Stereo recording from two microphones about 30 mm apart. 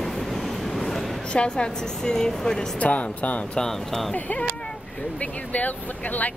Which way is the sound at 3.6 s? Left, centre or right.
Centre.